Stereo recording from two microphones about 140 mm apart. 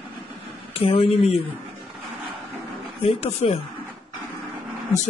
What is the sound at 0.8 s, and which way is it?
Speech, 45° left (ahead or behind).